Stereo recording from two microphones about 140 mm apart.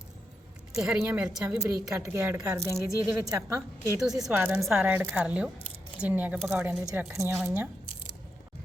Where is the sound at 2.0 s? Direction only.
20° right (ahead or behind).